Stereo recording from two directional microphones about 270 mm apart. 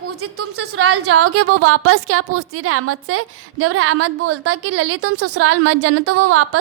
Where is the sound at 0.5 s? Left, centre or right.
Right.